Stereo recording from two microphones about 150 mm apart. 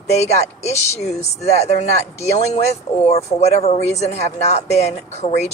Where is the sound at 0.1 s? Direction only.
45° left (ahead or behind).